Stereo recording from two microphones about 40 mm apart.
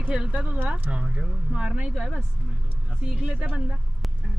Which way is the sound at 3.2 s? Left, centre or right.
Right.